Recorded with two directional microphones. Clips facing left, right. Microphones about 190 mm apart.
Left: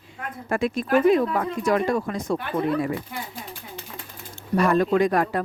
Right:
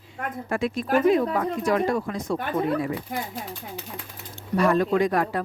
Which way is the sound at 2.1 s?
50° left (ahead or behind).